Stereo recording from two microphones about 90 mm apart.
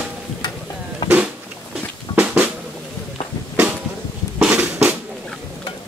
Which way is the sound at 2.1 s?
15° right (ahead or behind).